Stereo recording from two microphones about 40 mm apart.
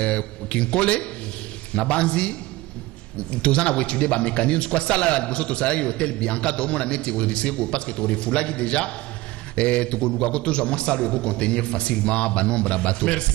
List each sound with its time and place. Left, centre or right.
0.0 s speech: left